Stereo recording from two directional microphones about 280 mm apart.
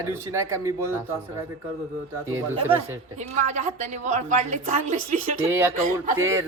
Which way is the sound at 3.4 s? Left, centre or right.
Right.